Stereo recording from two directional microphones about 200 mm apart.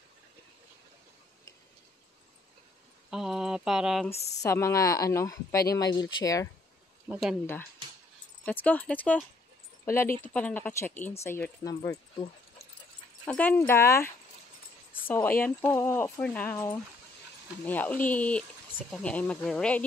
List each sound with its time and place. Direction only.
3.1 s a sound: 5° right (ahead or behind)
4.1 s speech: 30° left (ahead or behind)
4.4 s speech: 15° left (ahead or behind)
7.1 s speech: 5° right (ahead or behind)
8.5 s speech: 5° left (ahead or behind)
10.2 s speech: 10° left (ahead or behind)
13.3 s speech: 10° left (ahead or behind)